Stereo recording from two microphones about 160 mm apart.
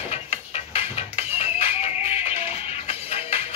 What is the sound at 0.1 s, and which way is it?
Music, 40° left (ahead or behind).